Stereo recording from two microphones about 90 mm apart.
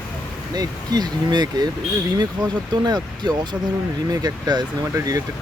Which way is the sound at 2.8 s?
50° right (ahead or behind).